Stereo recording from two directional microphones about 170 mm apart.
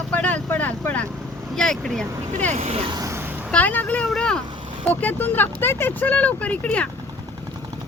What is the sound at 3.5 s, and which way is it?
Vehicle, 10° left (ahead or behind).